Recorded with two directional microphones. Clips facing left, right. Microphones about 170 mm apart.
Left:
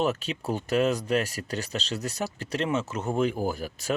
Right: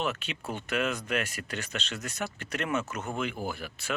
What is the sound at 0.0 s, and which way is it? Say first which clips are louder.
Speech: left 6 dB; 40° left (ahead or behind).